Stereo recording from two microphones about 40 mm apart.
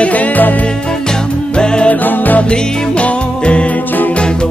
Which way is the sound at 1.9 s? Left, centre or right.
Left.